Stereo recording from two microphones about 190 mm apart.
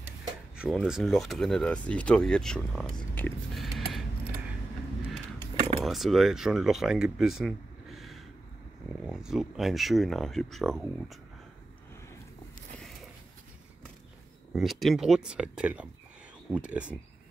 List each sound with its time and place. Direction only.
0.6 s speech: centre (ahead or behind)
5.8 s speech: centre (ahead or behind)
14.5 s speech: centre (ahead or behind)